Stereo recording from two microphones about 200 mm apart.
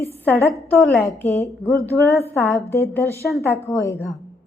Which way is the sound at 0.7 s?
10° left (ahead or behind).